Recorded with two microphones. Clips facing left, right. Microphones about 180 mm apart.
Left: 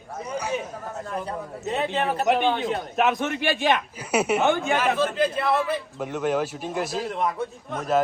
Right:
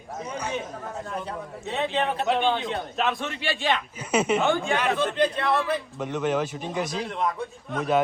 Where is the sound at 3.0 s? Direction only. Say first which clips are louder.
Left 5 dB; 20° left (ahead or behind).